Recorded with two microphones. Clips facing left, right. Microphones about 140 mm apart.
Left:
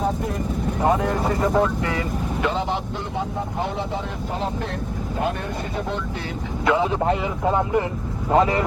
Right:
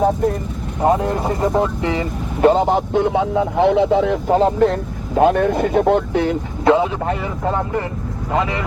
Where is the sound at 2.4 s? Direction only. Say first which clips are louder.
Right 12 dB; 45° right (ahead or behind).